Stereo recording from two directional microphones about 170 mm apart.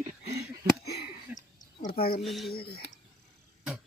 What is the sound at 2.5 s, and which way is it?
Speech, 65° left (ahead or behind).